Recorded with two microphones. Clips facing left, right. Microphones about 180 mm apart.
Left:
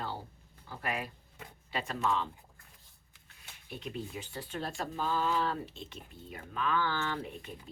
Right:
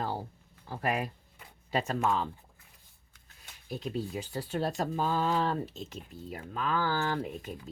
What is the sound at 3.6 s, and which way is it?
Speech, 40° right (ahead or behind).